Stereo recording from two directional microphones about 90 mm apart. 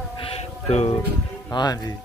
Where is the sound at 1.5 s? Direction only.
50° left (ahead or behind).